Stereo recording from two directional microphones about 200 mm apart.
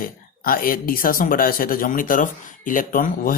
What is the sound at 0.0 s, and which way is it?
Speech, 45° left (ahead or behind).